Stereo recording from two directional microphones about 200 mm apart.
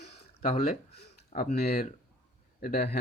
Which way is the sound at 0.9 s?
35° left (ahead or behind).